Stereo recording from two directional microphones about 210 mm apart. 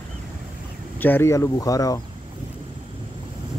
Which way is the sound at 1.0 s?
10° left (ahead or behind).